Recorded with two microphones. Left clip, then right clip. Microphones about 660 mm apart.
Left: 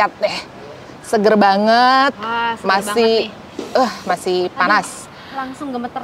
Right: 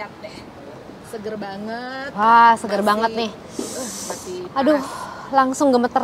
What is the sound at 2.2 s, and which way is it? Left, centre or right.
Speech, right.